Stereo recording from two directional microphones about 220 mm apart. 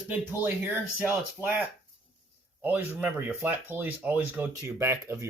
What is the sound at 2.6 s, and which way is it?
Speech, 10° right (ahead or behind).